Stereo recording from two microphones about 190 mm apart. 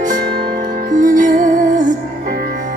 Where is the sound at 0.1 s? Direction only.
55° right (ahead or behind).